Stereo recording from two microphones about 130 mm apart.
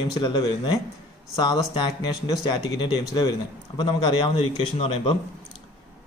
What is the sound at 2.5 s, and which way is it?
Speech, 35° left (ahead or behind).